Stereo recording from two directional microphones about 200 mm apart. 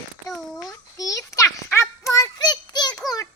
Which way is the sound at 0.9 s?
15° left (ahead or behind).